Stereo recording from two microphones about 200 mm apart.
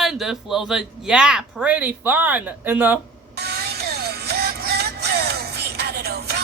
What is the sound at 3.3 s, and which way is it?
Music, 55° right (ahead or behind).